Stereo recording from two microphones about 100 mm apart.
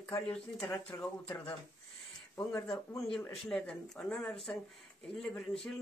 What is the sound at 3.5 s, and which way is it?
Speech, 5° left (ahead or behind).